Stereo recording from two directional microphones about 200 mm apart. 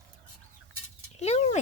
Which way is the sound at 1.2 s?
30° left (ahead or behind).